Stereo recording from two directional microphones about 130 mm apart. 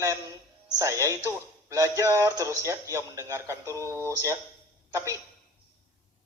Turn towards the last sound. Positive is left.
turn(degrees=-25)  # may be behind; listen again after turning